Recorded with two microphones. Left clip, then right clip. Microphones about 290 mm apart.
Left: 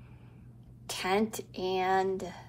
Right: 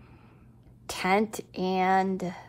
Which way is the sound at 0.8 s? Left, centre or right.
Right.